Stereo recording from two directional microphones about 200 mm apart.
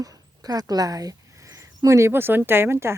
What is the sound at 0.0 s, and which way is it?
Speech, 20° right (ahead or behind).